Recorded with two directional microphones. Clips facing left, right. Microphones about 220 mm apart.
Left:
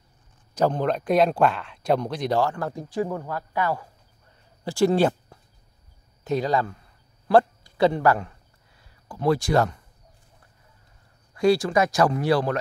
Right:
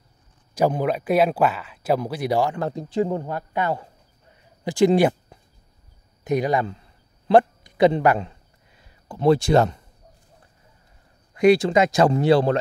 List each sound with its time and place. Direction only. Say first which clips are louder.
0.6 s speech: right 2 dB; 10° right (ahead or behind)
7.2 s a sound: right 2 dB; 20° right (ahead or behind)
11.3 s speech: right 4 dB; 20° right (ahead or behind)